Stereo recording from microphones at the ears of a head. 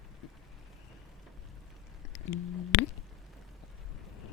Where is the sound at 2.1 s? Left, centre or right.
Left.